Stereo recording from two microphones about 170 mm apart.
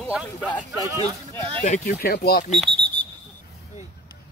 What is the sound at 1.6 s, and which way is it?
Speech, 60° left (ahead or behind).